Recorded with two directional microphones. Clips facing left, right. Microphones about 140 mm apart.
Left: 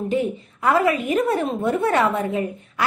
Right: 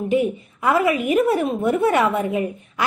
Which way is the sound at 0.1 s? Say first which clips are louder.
Right 5 dB; 15° right (ahead or behind).